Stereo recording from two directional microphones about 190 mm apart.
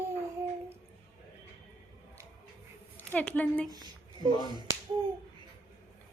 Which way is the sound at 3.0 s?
5° left (ahead or behind).